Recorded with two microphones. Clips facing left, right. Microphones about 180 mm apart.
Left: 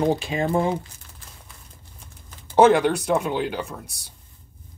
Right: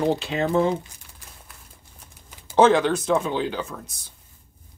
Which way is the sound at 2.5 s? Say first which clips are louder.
Left 1 dB; 10° left (ahead or behind).